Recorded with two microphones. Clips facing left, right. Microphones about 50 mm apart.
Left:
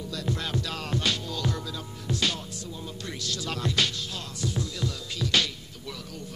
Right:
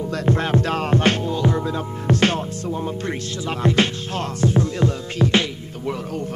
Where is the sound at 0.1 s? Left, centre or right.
Right.